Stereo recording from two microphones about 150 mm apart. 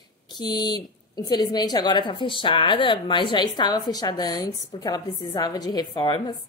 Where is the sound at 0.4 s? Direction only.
30° left (ahead or behind).